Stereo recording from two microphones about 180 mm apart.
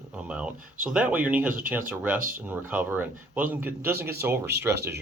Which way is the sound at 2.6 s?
10° right (ahead or behind).